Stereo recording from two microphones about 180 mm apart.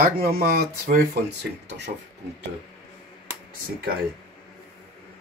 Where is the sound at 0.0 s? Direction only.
55° right (ahead or behind).